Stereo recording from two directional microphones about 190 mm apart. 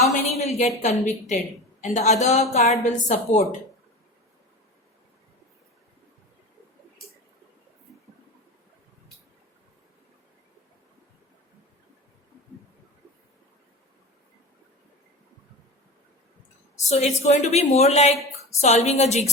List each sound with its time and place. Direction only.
0.1 s a woman's voice: 35° left (ahead or behind)
16.9 s a woman's voice: 35° left (ahead or behind)